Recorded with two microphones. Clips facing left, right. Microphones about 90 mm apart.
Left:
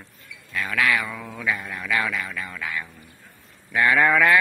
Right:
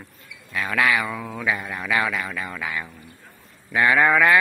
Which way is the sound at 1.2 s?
15° right (ahead or behind).